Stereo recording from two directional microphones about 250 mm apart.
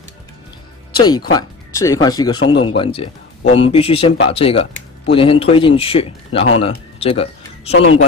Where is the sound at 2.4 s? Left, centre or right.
Left.